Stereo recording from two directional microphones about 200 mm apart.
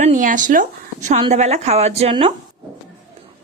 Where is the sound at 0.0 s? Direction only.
40° right (ahead or behind).